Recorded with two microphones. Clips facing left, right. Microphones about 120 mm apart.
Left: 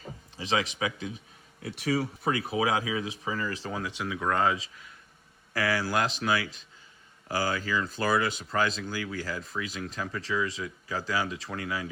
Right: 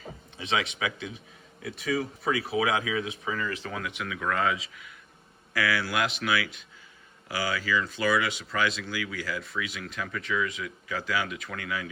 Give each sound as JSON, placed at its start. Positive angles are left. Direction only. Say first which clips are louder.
{"t": 0.3, "sound": "speech", "louder": "left 1 dB", "side_deg": 35}
{"t": 2.6, "sound": "speech", "louder": "right 1 dB", "side_deg": 35}